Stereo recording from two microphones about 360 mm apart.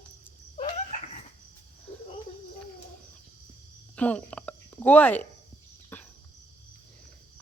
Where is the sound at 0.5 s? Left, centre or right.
Centre.